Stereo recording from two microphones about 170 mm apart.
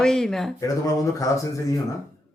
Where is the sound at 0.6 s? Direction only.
20° left (ahead or behind).